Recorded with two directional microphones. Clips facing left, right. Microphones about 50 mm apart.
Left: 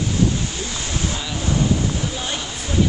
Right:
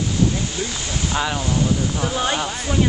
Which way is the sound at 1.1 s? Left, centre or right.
Right.